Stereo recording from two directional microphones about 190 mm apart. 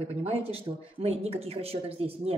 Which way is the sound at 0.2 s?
30° right (ahead or behind).